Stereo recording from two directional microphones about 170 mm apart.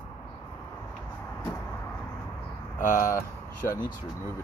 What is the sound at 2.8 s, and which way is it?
Speech, 50° left (ahead or behind).